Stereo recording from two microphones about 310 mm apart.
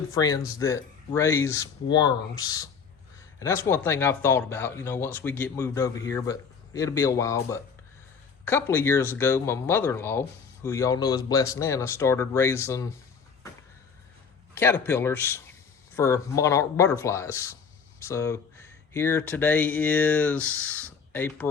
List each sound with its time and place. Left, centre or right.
0.1 s speech: centre
14.5 s speech: centre